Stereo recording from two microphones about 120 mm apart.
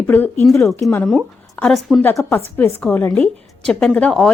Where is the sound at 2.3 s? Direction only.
20° left (ahead or behind).